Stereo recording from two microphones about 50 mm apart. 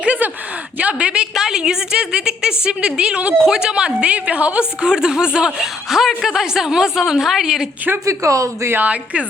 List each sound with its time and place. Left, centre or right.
0.0 s a sound: right
0.8 s a woman's voice: right
3.3 s a woman's voice: centre; by 4.6 s right
4.8 s a woman's voice: centre
8.0 s speech: right